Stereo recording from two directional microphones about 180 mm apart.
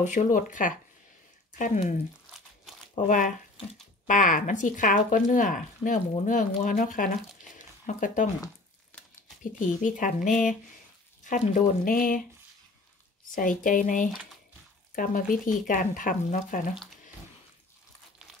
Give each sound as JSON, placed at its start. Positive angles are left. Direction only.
{"t": 0.0, "sound": "speech", "side_deg": 45}
{"t": 7.5, "sound": "a sound", "side_deg": 45}
{"t": 9.4, "sound": "speech", "side_deg": 45}
{"t": 11.2, "sound": "speech", "side_deg": 50}
{"t": 13.3, "sound": "speech", "side_deg": 50}